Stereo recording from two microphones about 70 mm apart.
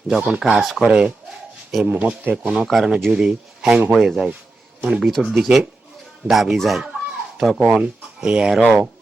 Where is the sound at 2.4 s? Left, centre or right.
Centre.